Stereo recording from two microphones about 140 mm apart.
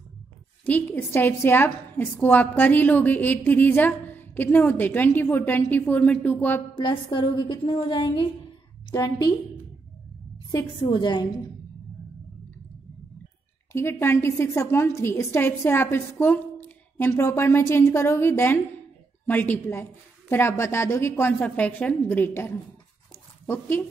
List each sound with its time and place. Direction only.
0.7 s a woman's voice: 10° left (ahead or behind)
6.7 s a woman's voice: 35° left (ahead or behind)
8.9 s a woman's voice: 25° left (ahead or behind)
10.8 s a woman's voice: 35° left (ahead or behind)
13.7 s a woman's voice: 15° left (ahead or behind)